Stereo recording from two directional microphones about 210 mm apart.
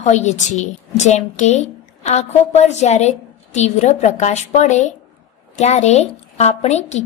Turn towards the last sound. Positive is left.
turn(degrees=30)  # may be behind; listen again after turning